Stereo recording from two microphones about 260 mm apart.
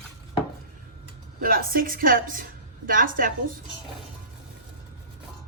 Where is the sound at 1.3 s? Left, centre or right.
Right.